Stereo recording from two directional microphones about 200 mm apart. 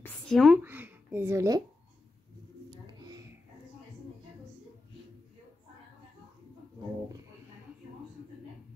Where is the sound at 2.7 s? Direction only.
20° right (ahead or behind).